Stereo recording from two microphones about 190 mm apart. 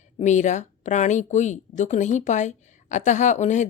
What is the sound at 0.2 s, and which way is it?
Speech, 40° left (ahead or behind).